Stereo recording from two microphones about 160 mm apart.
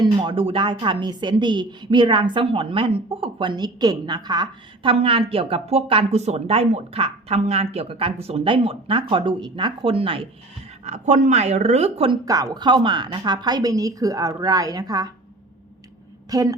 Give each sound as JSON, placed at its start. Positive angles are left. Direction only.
{"t": 0.0, "sound": "a woman's voice", "side_deg": -35}
{"t": 12.2, "sound": "a woman's voice", "side_deg": -20}
{"t": 16.3, "sound": "a woman's voice", "side_deg": -20}